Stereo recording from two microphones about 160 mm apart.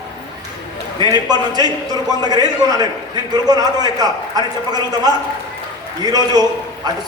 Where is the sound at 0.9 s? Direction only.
25° right (ahead or behind).